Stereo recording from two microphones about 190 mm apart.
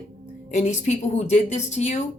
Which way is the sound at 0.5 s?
35° left (ahead or behind).